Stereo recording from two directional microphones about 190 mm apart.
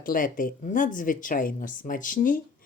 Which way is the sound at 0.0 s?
45° left (ahead or behind).